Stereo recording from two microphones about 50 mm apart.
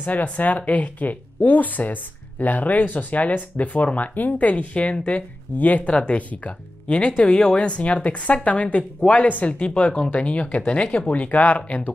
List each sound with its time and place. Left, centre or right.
0.0 s speech: left